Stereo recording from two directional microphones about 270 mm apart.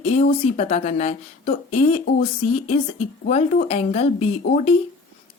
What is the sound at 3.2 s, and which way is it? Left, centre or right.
A woman's voice, left.